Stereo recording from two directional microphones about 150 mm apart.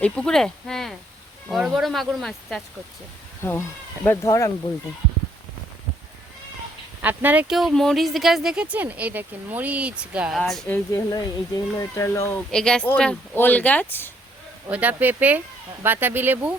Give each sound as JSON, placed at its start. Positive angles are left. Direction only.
{"t": 0.0, "sound": "speech", "side_deg": 5}
{"t": 3.4, "sound": "speech", "side_deg": 15}
{"t": 7.0, "sound": "speech", "side_deg": -10}
{"t": 10.7, "sound": "speech", "side_deg": 10}
{"t": 11.1, "sound": "speech", "side_deg": 25}
{"t": 12.5, "sound": "speech", "side_deg": 5}
{"t": 14.7, "sound": "speech", "side_deg": -10}